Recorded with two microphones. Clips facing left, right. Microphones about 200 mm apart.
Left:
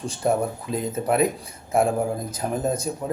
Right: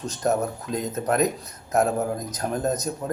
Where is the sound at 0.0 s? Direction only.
10° left (ahead or behind).